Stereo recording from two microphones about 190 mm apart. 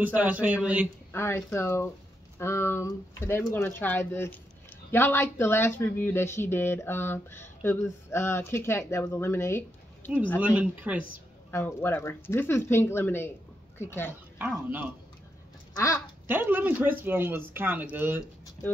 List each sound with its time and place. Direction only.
0.0 s a man's voice: 10° right (ahead or behind)
1.1 s speech: 15° left (ahead or behind)
10.4 s a man's voice: 5° right (ahead or behind)
11.5 s speech: 10° left (ahead or behind)
15.7 s a sound: 15° left (ahead or behind)
16.3 s a man's voice: 10° right (ahead or behind)